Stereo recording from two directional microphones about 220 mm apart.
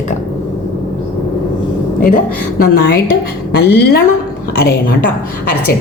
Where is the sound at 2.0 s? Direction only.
40° left (ahead or behind).